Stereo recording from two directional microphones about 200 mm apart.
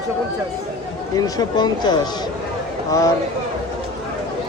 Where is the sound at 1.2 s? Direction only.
20° left (ahead or behind).